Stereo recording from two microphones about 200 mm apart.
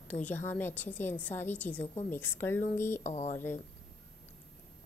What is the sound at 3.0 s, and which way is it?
Speech, 35° left (ahead or behind).